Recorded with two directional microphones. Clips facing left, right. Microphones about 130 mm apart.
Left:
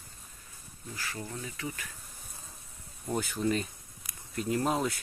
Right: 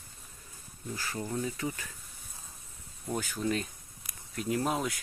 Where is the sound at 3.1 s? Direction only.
Centre (ahead or behind).